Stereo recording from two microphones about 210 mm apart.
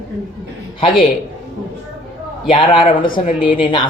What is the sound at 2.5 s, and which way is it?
Speech, 25° left (ahead or behind).